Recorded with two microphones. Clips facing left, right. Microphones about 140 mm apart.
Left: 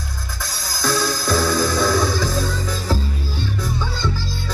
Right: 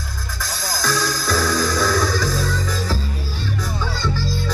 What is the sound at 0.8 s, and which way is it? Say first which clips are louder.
Music: left 2 dB; 20° left (ahead or behind).